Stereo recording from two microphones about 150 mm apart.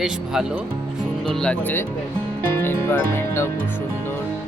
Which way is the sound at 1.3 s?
5° left (ahead or behind).